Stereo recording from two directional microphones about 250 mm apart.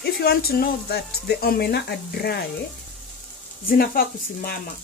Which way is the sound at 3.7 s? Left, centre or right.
Left.